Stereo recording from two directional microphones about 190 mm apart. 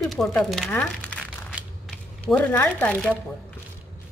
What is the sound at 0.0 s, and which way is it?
Speech, centre (ahead or behind).